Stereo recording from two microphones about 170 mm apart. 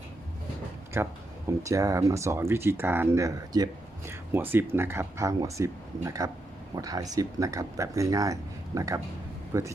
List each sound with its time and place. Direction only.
0.9 s speech: 15° right (ahead or behind)